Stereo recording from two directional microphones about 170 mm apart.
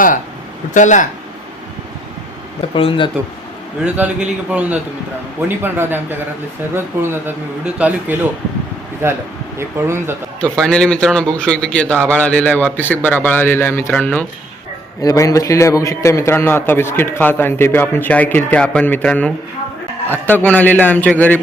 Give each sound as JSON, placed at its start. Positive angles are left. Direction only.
{"t": 0.7, "sound": "speech", "side_deg": 45}
{"t": 2.6, "sound": "speech", "side_deg": 30}
{"t": 3.8, "sound": "a man's voice", "side_deg": -10}
{"t": 10.4, "sound": "a man's voice", "side_deg": 5}